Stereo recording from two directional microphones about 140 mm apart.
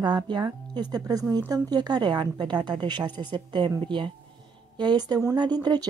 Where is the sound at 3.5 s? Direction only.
30° right (ahead or behind).